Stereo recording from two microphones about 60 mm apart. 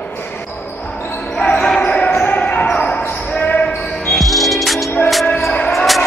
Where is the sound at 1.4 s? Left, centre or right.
Left.